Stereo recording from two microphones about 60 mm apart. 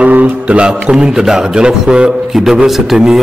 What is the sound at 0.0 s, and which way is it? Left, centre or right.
A man's voice, right.